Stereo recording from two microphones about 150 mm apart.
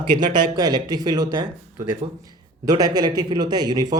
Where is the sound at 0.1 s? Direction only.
30° right (ahead or behind).